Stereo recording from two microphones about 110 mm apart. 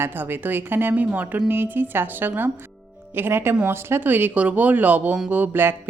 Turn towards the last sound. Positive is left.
turn(degrees=-20)  # may be behind; listen again after turning